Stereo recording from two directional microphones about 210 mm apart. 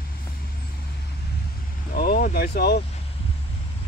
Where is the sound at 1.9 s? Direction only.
45° left (ahead or behind).